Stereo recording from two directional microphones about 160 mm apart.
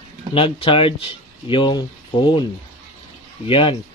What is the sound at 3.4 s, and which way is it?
Speech, 35° left (ahead or behind).